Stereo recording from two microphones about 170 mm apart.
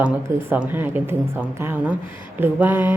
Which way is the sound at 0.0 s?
5° right (ahead or behind).